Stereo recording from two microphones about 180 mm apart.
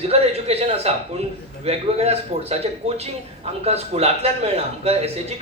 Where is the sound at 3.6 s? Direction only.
35° right (ahead or behind).